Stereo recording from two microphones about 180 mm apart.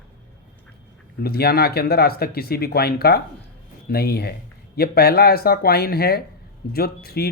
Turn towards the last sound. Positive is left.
turn(degrees=60)  # may be behind; listen again after turning